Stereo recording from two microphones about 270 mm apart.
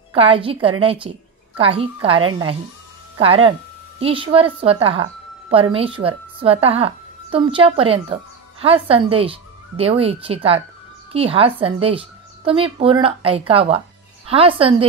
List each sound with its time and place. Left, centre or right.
0.1 s a woman's voice: centre